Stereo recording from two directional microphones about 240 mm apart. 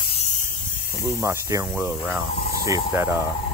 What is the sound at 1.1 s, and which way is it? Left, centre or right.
Speech, centre.